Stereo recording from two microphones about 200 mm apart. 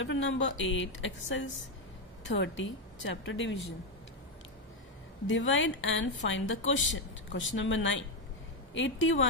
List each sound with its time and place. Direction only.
0.0 s a woman's voice: 70° left (ahead or behind)
5.2 s a woman's voice: 70° left (ahead or behind)